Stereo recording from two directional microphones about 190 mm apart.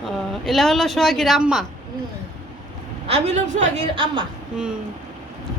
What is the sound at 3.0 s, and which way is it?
A woman's voice, 35° right (ahead or behind).